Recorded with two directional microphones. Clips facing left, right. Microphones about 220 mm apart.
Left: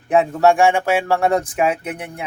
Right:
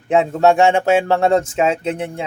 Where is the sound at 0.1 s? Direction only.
25° right (ahead or behind).